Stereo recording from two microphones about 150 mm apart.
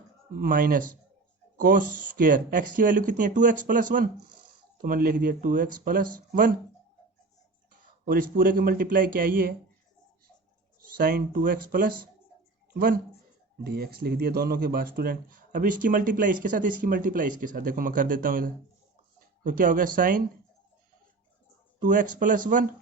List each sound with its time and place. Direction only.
0.3 s speech: 70° right (ahead or behind)
4.8 s speech: 75° right (ahead or behind)
8.0 s speech: 75° right (ahead or behind)
10.9 s speech: 75° right (ahead or behind)
13.7 s speech: 90° right; by 20.2 s 65° right (ahead or behind)
21.8 s speech: 60° right (ahead or behind)